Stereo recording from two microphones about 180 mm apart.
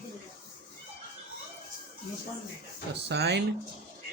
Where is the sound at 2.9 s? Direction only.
70° right (ahead or behind).